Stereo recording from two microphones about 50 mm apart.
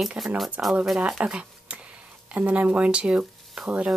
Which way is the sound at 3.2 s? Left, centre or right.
Centre.